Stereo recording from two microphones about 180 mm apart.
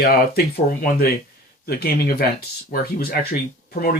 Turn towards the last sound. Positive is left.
turn(degrees=55)  # may be behind; listen again after turning